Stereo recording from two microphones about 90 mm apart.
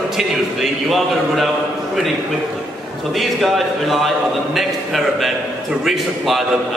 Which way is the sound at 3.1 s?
Centre (ahead or behind).